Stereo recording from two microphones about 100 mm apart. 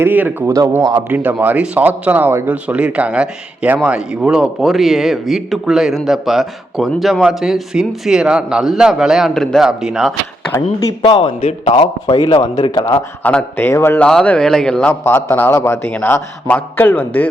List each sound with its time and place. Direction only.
0.0 s speech: 20° right (ahead or behind)
0.4 s speech: 35° right (ahead or behind)
1.1 s a man's voice: 15° right (ahead or behind); by 9.6 s 5° left (ahead or behind)
9.6 s speech: 5° right (ahead or behind)
11.0 s a man's voice: 60° left (ahead or behind); by 12.7 s 45° left (ahead or behind)
13.2 s a man's voice: 20° left (ahead or behind)
14.0 s speech: 10° left (ahead or behind)
15.0 s a man's voice: 20° left (ahead or behind)